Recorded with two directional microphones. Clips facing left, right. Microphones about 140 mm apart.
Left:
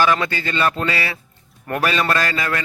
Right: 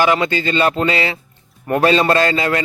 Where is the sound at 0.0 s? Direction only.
20° right (ahead or behind).